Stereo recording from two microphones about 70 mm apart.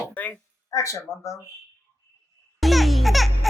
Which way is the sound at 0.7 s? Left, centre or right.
Left.